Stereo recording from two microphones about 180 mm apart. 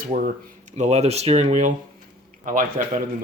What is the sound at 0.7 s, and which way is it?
Speech, 40° right (ahead or behind).